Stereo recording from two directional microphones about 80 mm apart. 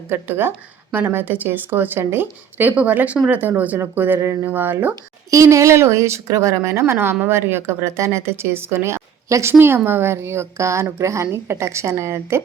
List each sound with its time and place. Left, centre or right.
0.1 s speech: right
5.3 s speech: right